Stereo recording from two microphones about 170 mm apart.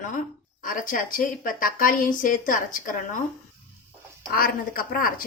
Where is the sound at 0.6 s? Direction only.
55° left (ahead or behind).